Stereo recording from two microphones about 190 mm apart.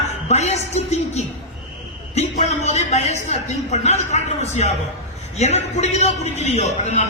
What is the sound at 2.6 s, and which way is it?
A man's voice, 35° left (ahead or behind).